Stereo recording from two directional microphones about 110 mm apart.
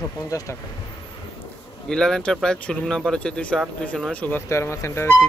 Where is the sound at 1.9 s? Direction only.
5° left (ahead or behind).